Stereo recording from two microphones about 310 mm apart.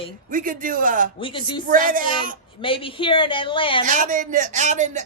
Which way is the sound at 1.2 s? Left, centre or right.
Centre.